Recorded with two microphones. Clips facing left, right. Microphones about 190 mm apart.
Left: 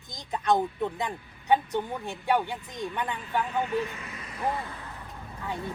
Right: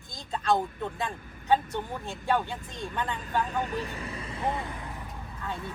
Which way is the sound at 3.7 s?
35° right (ahead or behind).